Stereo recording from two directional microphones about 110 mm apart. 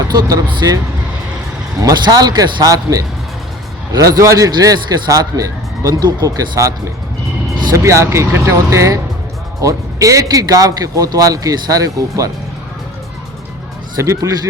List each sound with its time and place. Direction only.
0.1 s a man's voice: 35° right (ahead or behind)
1.8 s a man's voice: 35° right (ahead or behind)
7.8 s a man's voice: 25° right (ahead or behind)
14.0 s speech: 30° right (ahead or behind)